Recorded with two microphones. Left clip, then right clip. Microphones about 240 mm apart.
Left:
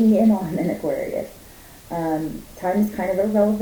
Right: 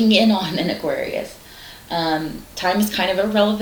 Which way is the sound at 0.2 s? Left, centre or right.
Right.